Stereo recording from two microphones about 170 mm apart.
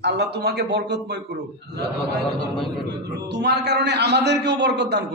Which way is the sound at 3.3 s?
85° right.